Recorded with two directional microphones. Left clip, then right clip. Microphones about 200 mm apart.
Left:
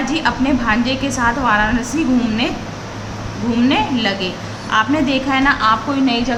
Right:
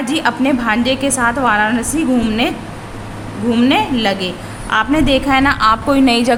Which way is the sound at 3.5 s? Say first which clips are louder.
Right 2 dB; 35° right (ahead or behind).